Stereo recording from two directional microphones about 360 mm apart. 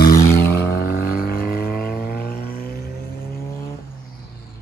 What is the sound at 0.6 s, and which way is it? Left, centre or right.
Vehicle, left.